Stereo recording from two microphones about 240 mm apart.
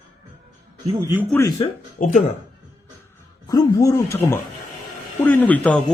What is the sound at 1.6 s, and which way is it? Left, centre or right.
Speech, left.